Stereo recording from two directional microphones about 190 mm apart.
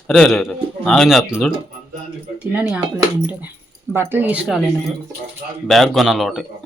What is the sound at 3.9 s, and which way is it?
Speech, 10° right (ahead or behind).